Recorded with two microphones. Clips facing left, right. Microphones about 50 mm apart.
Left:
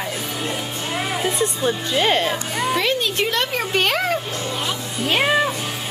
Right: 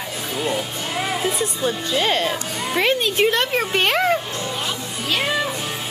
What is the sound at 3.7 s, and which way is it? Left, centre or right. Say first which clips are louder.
Speech: right 1 dB; centre.